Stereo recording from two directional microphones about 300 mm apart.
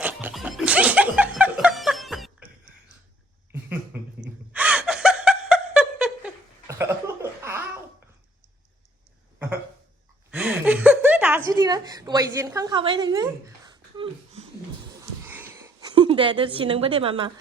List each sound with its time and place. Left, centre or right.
0.0 s music: centre
4.2 s gasp: centre
10.3 s a sound: centre
15.2 s wheeze: centre
15.6 s a woman's voice: centre